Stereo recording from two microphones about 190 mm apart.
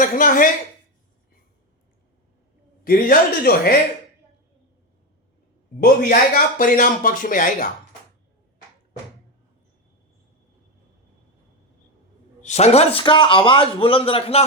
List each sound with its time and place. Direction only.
0.0 s speech: 45° left (ahead or behind)
2.8 s speech: 50° left (ahead or behind)
5.8 s speech: 50° left (ahead or behind)
12.4 s a man's voice: 35° left (ahead or behind)